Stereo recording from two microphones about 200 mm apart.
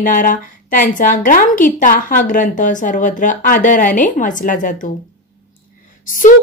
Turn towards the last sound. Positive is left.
turn(degrees=40)  # may be behind; listen again after turning